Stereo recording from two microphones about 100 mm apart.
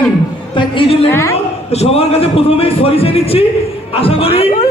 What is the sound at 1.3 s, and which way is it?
A man's voice, 90° left.